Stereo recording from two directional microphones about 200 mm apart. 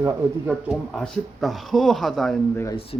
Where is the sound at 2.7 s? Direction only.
30° left (ahead or behind).